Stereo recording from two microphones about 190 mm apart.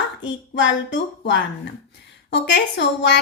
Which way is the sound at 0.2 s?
80° left.